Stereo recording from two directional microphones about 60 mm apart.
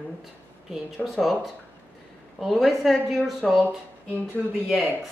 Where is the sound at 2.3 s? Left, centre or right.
Centre.